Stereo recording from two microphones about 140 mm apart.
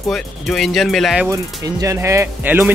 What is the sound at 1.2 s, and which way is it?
Speech, 25° right (ahead or behind).